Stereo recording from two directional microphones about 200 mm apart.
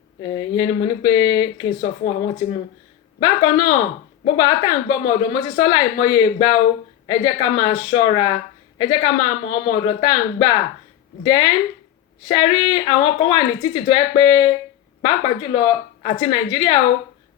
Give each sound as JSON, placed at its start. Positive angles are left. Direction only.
{"t": 0.2, "sound": "speech", "side_deg": 25}
{"t": 11.2, "sound": "speech", "side_deg": 25}